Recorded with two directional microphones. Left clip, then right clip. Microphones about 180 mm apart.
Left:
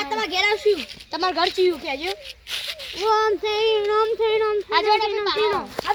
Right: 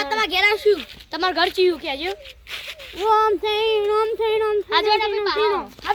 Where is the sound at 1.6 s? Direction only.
10° right (ahead or behind).